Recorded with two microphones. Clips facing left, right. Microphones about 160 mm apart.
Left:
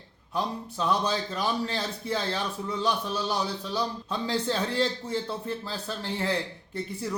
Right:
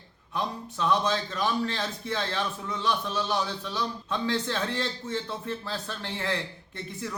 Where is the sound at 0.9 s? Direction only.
35° left (ahead or behind).